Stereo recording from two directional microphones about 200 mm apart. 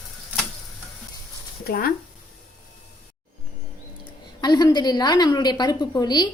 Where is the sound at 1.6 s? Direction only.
50° left (ahead or behind).